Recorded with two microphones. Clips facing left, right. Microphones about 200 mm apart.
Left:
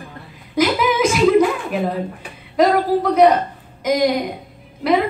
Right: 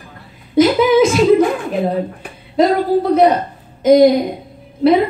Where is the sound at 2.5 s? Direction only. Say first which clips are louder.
Right 2 dB; 30° right (ahead or behind).